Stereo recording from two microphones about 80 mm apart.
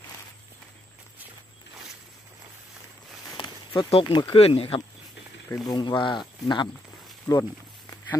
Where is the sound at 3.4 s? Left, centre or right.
Left.